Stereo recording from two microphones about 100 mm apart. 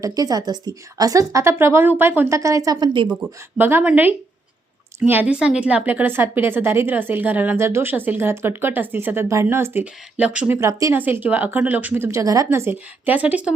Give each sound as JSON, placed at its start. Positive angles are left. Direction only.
{"t": 0.0, "sound": "a woman's voice", "side_deg": -35}
{"t": 2.8, "sound": "speech", "side_deg": -55}
{"t": 3.1, "sound": "a woman's voice", "side_deg": -20}
{"t": 9.8, "sound": "speech", "side_deg": -15}
{"t": 10.6, "sound": "a woman's voice", "side_deg": -35}
{"t": 10.9, "sound": "speech", "side_deg": -20}
{"t": 12.2, "sound": "a woman's voice", "side_deg": -35}